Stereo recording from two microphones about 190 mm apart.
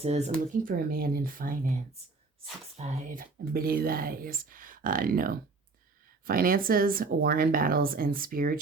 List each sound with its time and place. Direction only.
0.0 s speech: 35° right (ahead or behind)
0.6 s speech: 50° right (ahead or behind)